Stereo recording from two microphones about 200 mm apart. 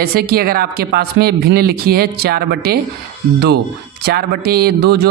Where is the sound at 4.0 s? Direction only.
50° right (ahead or behind).